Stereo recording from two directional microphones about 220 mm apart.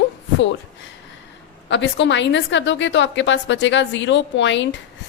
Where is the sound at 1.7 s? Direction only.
55° left (ahead or behind).